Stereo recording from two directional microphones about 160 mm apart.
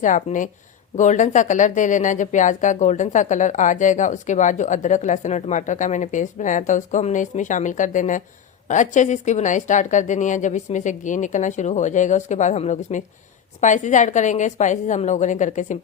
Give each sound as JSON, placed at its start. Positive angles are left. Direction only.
{"t": 0.0, "sound": "speech", "side_deg": 50}